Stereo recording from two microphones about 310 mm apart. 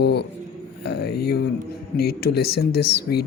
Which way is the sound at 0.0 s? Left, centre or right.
Left.